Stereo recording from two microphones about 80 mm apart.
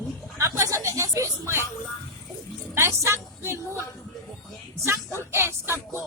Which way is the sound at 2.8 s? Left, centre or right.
Right.